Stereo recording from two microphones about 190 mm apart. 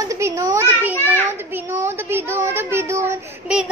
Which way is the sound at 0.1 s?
15° right (ahead or behind).